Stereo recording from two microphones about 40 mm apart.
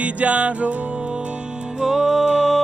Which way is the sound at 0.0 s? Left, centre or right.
Right.